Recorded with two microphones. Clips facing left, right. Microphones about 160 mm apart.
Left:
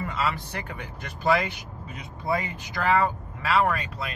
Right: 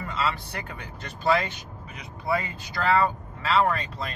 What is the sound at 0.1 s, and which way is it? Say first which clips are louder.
Speech: even; 15° left (ahead or behind).